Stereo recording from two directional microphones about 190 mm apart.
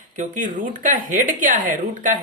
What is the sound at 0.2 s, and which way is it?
Speech, 45° right (ahead or behind).